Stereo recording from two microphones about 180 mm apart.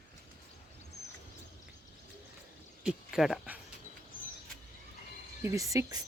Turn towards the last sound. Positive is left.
turn(degrees=-20)  # may be behind; listen again after turning